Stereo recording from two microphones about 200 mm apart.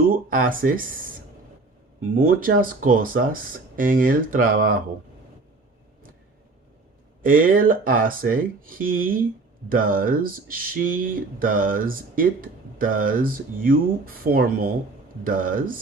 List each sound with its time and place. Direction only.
0.3 s speech: 45° right (ahead or behind)
2.1 s speech: 45° right (ahead or behind)
7.2 s speech: 45° right (ahead or behind)